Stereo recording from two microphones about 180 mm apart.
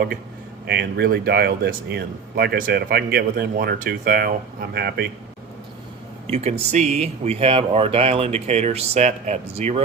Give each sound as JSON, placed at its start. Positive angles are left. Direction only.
{"t": 0.7, "sound": "speech", "side_deg": -65}
{"t": 6.2, "sound": "speech", "side_deg": -35}